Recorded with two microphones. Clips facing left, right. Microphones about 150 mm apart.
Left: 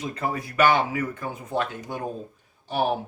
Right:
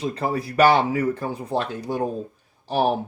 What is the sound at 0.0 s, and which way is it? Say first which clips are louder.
Speech: right 4 dB; 30° right (ahead or behind).